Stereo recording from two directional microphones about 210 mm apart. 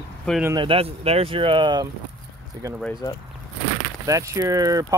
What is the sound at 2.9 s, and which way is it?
Speech, 20° left (ahead or behind).